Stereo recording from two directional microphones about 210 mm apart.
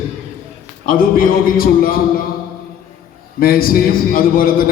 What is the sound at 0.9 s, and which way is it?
A man's voice, 45° left (ahead or behind).